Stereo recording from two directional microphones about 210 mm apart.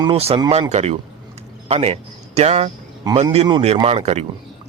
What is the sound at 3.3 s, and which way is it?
Speech, 30° right (ahead or behind).